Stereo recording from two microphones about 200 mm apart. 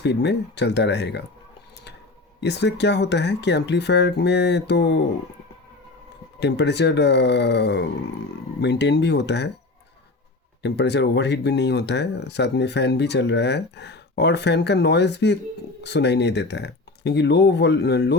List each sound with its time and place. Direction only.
0.0 s speech: 60° left (ahead or behind)
2.4 s speech: 60° left (ahead or behind)
6.4 s speech: 60° left (ahead or behind)
10.6 s speech: 60° left (ahead or behind)